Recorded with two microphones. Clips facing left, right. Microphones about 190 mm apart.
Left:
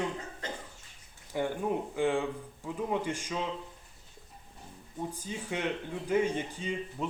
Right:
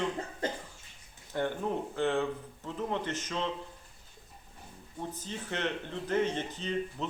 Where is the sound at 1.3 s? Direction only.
10° left (ahead or behind).